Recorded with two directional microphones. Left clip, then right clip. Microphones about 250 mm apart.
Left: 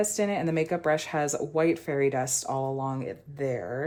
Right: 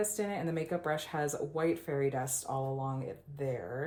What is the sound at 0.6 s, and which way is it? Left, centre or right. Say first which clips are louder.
Speech: left 8 dB; left.